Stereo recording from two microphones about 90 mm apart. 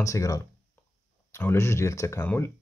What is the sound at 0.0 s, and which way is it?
Speech, 40° left (ahead or behind).